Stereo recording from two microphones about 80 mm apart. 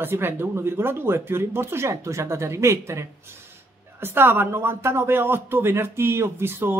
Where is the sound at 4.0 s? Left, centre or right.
Right.